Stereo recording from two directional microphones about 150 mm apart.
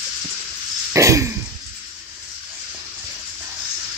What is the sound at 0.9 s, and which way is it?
Throat clearing, 20° right (ahead or behind).